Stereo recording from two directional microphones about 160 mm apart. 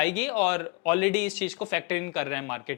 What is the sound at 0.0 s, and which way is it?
Speech, 10° left (ahead or behind).